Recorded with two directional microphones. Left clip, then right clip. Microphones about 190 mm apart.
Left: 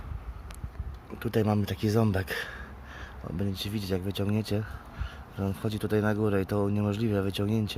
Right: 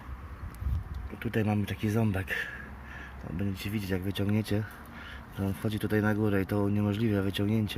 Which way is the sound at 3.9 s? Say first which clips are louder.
Left 1 dB; 10° left (ahead or behind).